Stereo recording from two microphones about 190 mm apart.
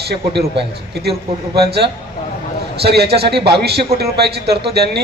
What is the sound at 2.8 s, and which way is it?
A man's voice, 60° right (ahead or behind).